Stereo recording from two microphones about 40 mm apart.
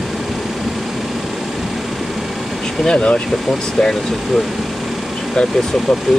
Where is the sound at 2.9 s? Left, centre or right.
Left.